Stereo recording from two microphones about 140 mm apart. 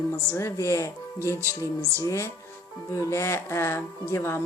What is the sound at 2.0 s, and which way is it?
A woman's voice, 20° left (ahead or behind).